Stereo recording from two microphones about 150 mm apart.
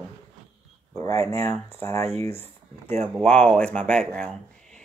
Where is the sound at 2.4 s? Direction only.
45° right (ahead or behind).